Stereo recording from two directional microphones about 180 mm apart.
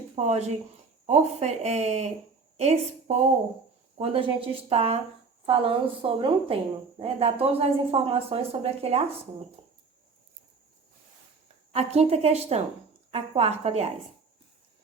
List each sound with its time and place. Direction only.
0.2 s a woman's voice: 40° right (ahead or behind)
11.7 s speech: 35° right (ahead or behind)